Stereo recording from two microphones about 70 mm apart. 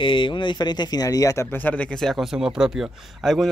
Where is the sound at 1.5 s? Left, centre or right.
Left.